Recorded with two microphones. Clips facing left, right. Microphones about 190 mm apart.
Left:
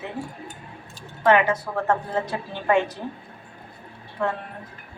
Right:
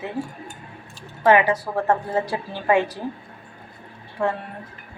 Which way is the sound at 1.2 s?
10° right (ahead or behind).